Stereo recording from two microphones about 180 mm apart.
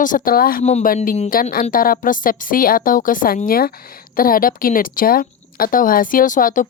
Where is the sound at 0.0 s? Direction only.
50° left (ahead or behind).